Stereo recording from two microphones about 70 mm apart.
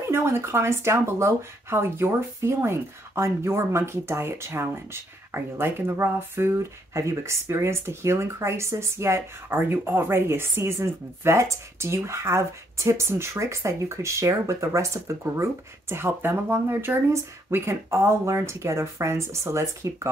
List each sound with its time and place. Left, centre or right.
0.0 s speech: right